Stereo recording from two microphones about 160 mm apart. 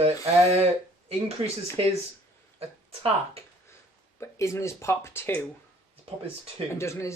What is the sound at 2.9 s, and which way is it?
Speech, 40° right (ahead or behind).